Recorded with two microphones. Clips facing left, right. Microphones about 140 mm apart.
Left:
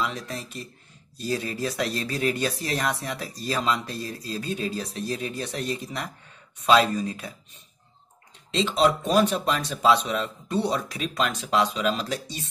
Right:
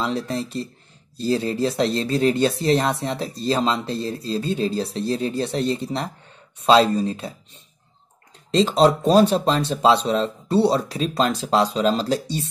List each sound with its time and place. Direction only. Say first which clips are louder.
0.0 s speech: right 6 dB; 30° right (ahead or behind)
8.5 s speech: right 6 dB; 35° right (ahead or behind)